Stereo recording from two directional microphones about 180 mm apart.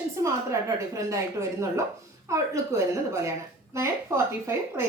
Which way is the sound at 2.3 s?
15° right (ahead or behind).